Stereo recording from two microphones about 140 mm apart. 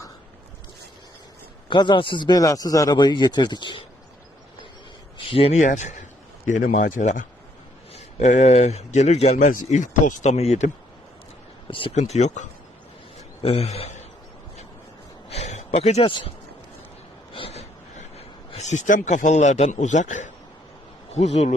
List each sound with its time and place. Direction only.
1.7 s a man's voice: 35° left (ahead or behind)
5.1 s speech: 40° left (ahead or behind)
5.6 s speech: 60° left (ahead or behind)
11.7 s a man's voice: 40° left (ahead or behind)
12.1 s speech: 55° left (ahead or behind)
13.4 s a man's voice: 45° left (ahead or behind)
15.3 s a sound: 50° left (ahead or behind)
17.3 s a sound: 45° left (ahead or behind)
18.5 s speech: 55° left (ahead or behind)
21.1 s speech: 50° left (ahead or behind)